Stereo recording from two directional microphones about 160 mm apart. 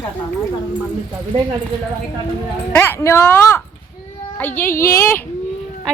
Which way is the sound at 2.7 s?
15° left (ahead or behind).